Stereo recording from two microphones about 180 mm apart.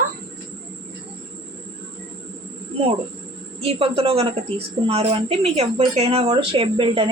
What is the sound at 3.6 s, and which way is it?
A woman's voice, 30° right (ahead or behind).